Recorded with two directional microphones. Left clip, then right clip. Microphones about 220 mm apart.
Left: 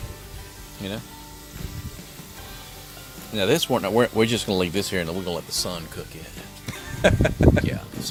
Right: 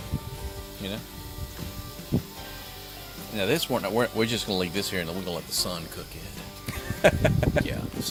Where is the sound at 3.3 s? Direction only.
45° left (ahead or behind).